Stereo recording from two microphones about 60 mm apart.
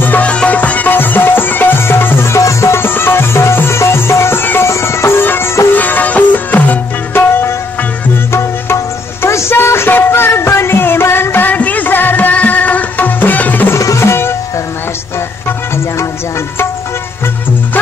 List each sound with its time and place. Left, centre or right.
0.0 s music: left
2.3 s music: left
2.8 s music: left
8.3 s music: left
13.7 s music: left